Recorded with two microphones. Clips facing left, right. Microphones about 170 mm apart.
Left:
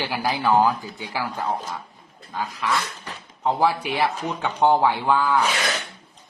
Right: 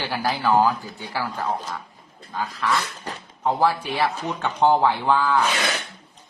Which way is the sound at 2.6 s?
15° left (ahead or behind).